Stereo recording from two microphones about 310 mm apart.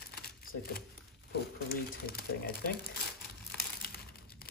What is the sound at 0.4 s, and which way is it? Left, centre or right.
Speech, left.